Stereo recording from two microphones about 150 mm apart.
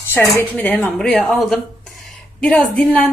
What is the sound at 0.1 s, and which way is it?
A woman's voice, 10° left (ahead or behind).